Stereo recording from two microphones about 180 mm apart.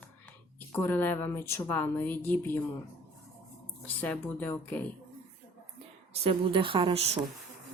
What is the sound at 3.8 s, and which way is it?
Speech, 10° left (ahead or behind).